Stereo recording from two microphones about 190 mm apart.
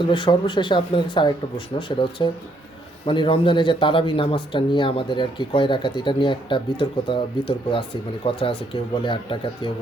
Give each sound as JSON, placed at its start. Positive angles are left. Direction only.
{"t": 0.0, "sound": "speech", "side_deg": 25}